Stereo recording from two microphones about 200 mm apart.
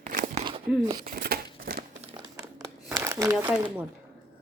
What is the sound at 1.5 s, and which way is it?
Crumpling, 45° right (ahead or behind).